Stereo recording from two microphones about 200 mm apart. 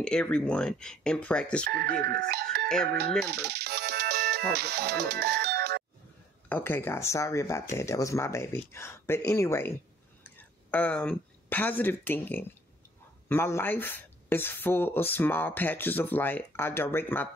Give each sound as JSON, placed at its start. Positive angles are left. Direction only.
{"t": 0.0, "sound": "speech", "side_deg": 5}
{"t": 1.7, "sound": "speech", "side_deg": -50}
{"t": 3.3, "sound": "music", "side_deg": -55}
{"t": 6.5, "sound": "speech", "side_deg": 10}